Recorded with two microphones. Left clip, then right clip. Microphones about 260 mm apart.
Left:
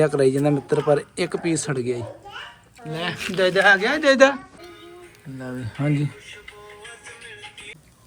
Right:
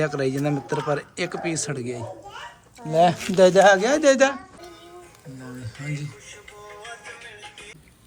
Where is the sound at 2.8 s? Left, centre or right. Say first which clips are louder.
Right 9 dB; centre.